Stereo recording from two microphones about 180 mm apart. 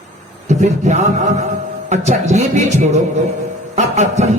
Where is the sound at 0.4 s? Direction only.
40° right (ahead or behind).